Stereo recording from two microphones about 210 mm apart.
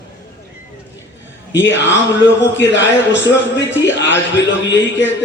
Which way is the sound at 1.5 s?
60° left (ahead or behind).